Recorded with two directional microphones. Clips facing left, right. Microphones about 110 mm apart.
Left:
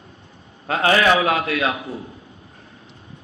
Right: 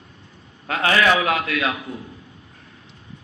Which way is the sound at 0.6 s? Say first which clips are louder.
Left 2 dB; 30° left (ahead or behind).